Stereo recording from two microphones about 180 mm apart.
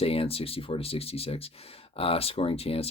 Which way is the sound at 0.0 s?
30° left (ahead or behind).